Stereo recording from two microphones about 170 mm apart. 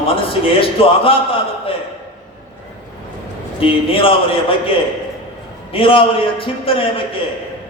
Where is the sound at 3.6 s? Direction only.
35° left (ahead or behind).